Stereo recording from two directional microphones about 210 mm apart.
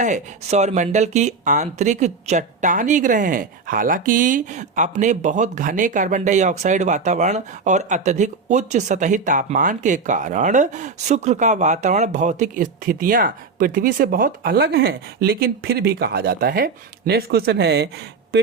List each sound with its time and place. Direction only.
0.0 s speech: 35° right (ahead or behind); by 17.8 s 55° right (ahead or behind)